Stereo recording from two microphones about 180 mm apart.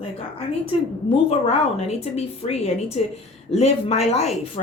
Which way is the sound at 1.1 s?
35° left (ahead or behind).